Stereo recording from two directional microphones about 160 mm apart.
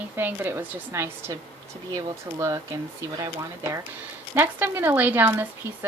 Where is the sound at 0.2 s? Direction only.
15° right (ahead or behind).